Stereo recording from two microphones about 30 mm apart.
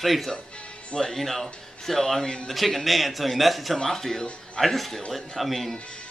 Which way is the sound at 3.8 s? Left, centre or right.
Centre.